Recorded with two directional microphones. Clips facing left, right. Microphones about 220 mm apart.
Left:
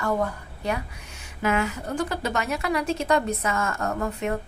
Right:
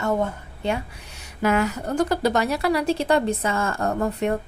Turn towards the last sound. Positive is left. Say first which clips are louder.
# right 4 dB
turn(degrees=-35)  # may be behind; listen again after turning